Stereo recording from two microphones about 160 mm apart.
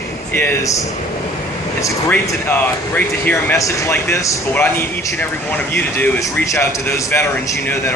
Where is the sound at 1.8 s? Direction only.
15° left (ahead or behind).